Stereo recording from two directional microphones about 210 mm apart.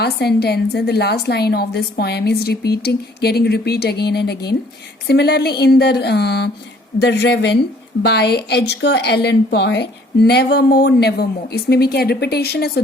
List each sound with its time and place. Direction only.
0.0 s a woman's voice: 50° left (ahead or behind)